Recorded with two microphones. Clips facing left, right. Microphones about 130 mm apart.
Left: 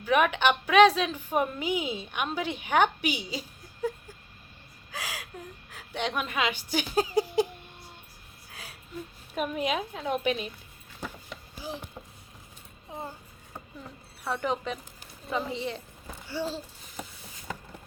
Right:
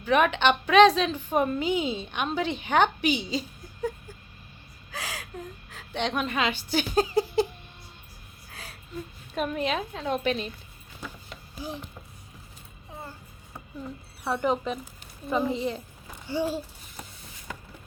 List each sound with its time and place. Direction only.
0.0 s a woman's voice: 10° left (ahead or behind)
4.9 s a woman's voice: 10° left (ahead or behind)
8.5 s a sound: 10° left (ahead or behind)
9.3 s a woman's voice: 10° left (ahead or behind)
11.5 s speech: 5° left (ahead or behind)
13.0 s a sound: 20° left (ahead or behind)
14.3 s speech: 5° right (ahead or behind)
16.3 s babbling: 15° right (ahead or behind)